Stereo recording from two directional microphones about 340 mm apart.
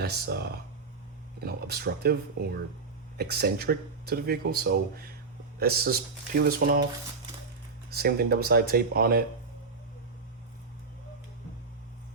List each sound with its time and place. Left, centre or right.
0.0 s speech: right
3.2 s speech: right
7.9 s speech: right